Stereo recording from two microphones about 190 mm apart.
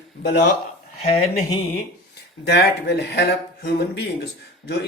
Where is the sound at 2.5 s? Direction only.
60° left (ahead or behind).